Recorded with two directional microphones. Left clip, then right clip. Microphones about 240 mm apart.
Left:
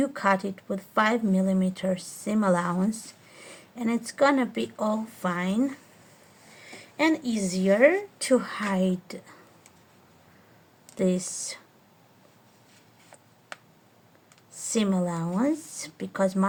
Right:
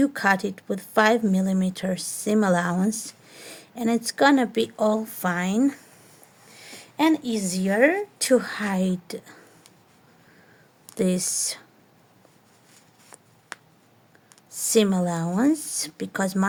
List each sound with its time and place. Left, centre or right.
0.0 s a woman's voice: right
10.9 s speech: right
14.7 s speech: right